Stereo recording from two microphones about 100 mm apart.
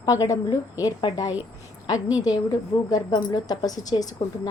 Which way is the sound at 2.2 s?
40° left (ahead or behind).